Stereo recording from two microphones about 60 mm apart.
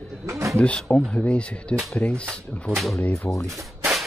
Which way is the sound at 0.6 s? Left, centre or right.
Left.